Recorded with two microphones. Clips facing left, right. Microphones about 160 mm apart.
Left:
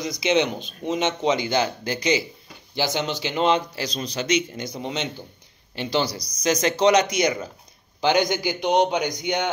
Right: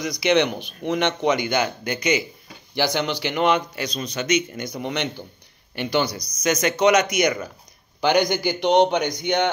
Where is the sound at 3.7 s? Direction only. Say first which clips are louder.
Right 1 dB; 30° left (ahead or behind).